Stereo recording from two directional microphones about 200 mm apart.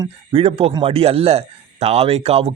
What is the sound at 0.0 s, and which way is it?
Speech, 30° right (ahead or behind).